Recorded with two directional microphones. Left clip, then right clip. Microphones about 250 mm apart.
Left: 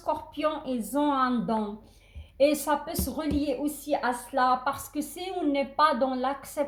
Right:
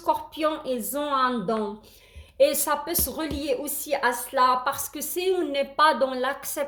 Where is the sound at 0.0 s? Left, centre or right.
Right.